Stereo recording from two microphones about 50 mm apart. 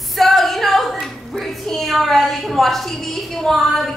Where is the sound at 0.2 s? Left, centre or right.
Centre.